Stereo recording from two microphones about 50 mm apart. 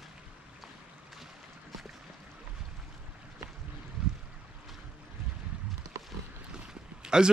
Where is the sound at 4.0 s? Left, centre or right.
Centre.